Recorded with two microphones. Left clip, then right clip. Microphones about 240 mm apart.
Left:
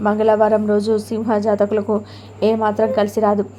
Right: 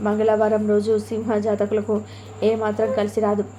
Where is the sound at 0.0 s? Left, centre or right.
Left.